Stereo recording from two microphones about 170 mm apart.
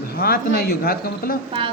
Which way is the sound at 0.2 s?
60° left (ahead or behind).